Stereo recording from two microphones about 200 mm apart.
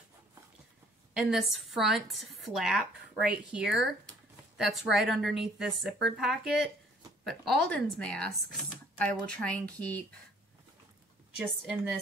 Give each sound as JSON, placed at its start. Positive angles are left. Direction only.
{"t": 1.1, "sound": "speech", "side_deg": 0}
{"t": 11.4, "sound": "a woman's voice", "side_deg": -5}